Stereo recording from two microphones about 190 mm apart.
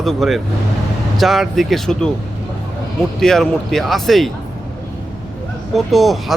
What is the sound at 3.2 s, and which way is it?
Speech, centre (ahead or behind).